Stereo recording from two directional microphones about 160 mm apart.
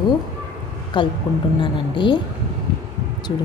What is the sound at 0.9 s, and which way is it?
A woman's voice, 30° left (ahead or behind).